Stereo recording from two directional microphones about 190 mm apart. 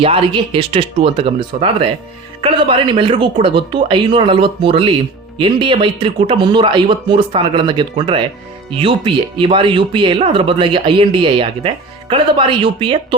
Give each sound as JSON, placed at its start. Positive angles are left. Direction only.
{"t": 0.0, "sound": "speech", "side_deg": -30}